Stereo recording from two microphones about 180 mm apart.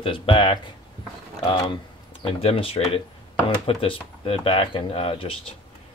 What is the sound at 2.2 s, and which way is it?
Speech, 30° left (ahead or behind).